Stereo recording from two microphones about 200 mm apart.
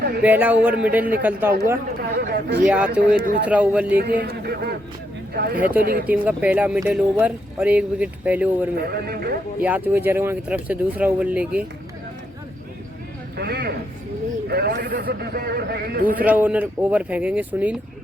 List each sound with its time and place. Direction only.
0.2 s speech: 10° right (ahead or behind)
2.0 s a man's voice: 50° right (ahead or behind)
2.6 s speech: 5° right (ahead or behind)
3.9 s a man's voice: 55° right (ahead or behind)
6.1 s speech: 5° right (ahead or behind)
8.8 s a man's voice: 50° right (ahead or behind)
9.6 s speech: 10° right (ahead or behind)
13.3 s a man's voice: 50° right (ahead or behind)
16.2 s speech: 10° right (ahead or behind)